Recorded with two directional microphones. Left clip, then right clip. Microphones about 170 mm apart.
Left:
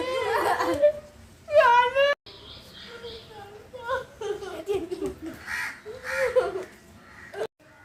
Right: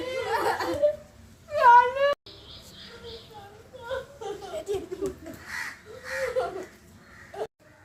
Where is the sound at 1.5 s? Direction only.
40° left (ahead or behind).